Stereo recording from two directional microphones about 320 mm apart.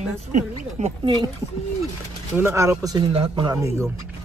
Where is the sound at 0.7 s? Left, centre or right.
Centre.